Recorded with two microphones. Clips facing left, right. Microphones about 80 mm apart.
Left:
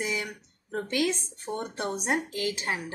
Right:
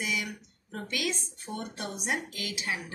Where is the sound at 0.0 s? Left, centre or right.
Left.